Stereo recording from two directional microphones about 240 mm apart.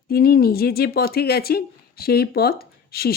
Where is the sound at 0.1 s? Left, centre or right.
Left.